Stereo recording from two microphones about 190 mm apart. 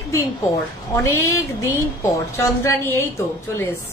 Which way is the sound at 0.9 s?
15° left (ahead or behind).